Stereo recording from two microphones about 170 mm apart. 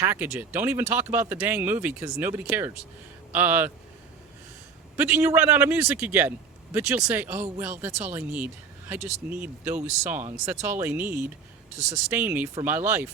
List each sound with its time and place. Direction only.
0.0 s speech: 10° right (ahead or behind)
4.9 s speech: 10° right (ahead or behind)
9.0 s speech: 40° right (ahead or behind)
9.3 s speech: 10° right (ahead or behind)